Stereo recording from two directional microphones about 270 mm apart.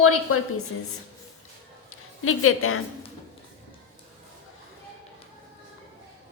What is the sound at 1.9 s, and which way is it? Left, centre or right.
Speech, left.